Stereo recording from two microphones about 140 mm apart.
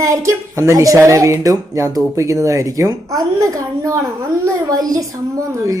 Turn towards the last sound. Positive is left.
turn(degrees=-20)  # may be behind; listen again after turning